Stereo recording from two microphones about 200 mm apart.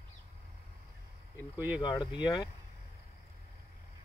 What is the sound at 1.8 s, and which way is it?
Speech, 20° left (ahead or behind).